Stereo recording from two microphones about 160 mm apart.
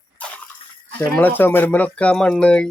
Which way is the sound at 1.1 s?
10° left (ahead or behind).